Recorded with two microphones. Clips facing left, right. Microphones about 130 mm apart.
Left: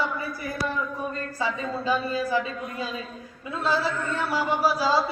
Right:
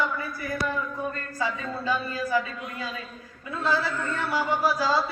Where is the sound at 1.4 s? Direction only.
20° left (ahead or behind).